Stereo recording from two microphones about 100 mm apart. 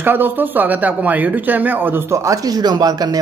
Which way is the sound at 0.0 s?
20° right (ahead or behind).